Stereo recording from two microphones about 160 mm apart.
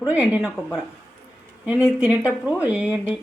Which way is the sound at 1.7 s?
5° right (ahead or behind).